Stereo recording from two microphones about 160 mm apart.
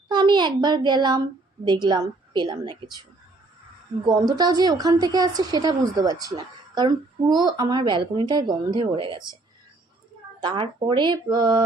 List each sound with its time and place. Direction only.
0.1 s a child's voice: 30° right (ahead or behind)
4.0 s a woman's voice: 25° right (ahead or behind)
10.4 s a woman's voice: 30° right (ahead or behind)